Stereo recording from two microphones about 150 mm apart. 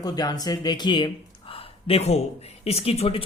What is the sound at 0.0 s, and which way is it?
Speech, 25° left (ahead or behind).